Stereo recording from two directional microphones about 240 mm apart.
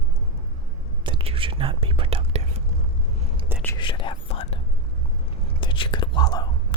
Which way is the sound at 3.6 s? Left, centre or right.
Centre.